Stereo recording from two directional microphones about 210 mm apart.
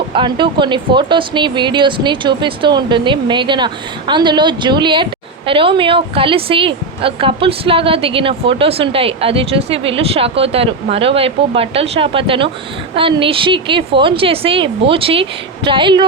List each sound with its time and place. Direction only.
0.1 s a woman's voice: 25° right (ahead or behind)